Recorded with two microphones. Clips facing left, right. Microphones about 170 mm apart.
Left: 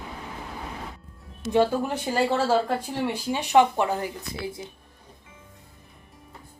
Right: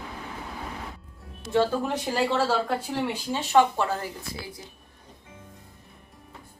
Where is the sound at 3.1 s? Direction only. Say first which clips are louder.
Left 2 dB; 15° left (ahead or behind).